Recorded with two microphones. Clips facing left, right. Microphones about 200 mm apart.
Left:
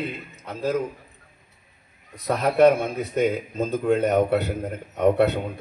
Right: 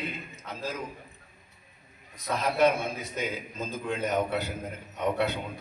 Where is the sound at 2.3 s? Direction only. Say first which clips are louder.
Left 7 dB; 60° left (ahead or behind).